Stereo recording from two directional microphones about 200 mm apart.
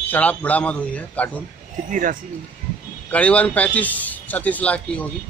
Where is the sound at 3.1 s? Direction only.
5° left (ahead or behind).